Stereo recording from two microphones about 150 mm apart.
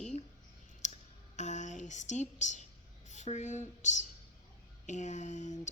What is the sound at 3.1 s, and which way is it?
Speech, 50° left (ahead or behind).